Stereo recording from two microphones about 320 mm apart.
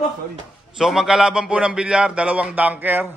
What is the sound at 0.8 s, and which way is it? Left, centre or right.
A man's voice, centre.